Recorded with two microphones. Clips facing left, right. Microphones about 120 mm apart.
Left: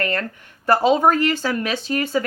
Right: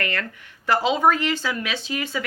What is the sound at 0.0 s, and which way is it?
Speech, 40° left (ahead or behind).